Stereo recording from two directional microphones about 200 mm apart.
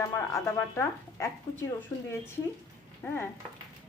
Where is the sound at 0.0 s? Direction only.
15° left (ahead or behind).